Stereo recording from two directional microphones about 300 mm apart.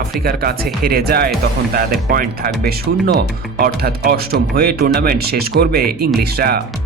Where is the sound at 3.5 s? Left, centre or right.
Right.